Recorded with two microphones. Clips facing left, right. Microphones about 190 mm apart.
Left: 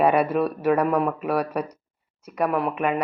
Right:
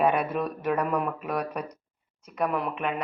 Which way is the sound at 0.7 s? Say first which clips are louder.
Left 6 dB; 65° left (ahead or behind).